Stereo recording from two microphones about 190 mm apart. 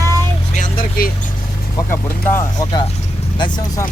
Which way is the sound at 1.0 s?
50° left (ahead or behind).